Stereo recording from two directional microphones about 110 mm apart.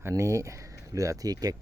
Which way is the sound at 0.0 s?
30° right (ahead or behind).